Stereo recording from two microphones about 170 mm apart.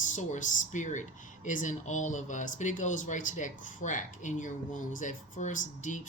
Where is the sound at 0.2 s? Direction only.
45° left (ahead or behind).